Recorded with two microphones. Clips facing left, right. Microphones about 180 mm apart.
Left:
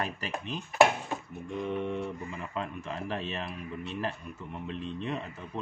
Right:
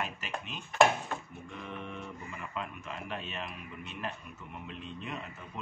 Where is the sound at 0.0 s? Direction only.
35° left (ahead or behind).